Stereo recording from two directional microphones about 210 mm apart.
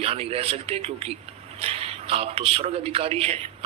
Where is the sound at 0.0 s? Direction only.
30° right (ahead or behind).